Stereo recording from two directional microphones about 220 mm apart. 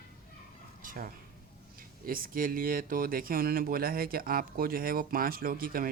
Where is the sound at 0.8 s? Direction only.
40° right (ahead or behind).